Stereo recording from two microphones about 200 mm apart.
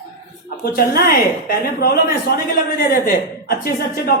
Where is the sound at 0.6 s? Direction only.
50° left (ahead or behind).